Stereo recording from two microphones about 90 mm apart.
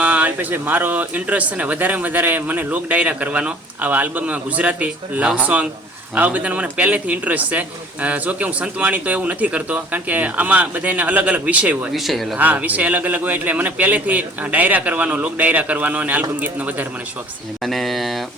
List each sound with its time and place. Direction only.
0.0 s speech: 15° right (ahead or behind)
11.9 s speech: centre (ahead or behind)
12.4 s speech: 20° right (ahead or behind)
17.6 s a sound: centre (ahead or behind)